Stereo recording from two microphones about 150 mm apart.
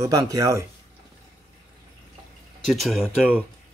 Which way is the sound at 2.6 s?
Centre (ahead or behind).